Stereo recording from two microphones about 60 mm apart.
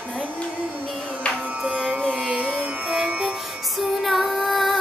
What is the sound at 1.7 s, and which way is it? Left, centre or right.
Music, right.